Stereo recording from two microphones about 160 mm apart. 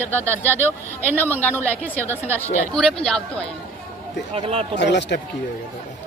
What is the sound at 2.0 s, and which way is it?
Speech, 15° right (ahead or behind).